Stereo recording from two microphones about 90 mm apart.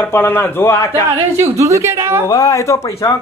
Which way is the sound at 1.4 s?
35° right (ahead or behind).